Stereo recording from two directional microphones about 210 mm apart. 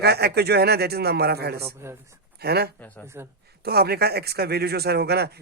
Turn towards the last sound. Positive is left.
turn(degrees=-50)  # may be behind; listen again after turning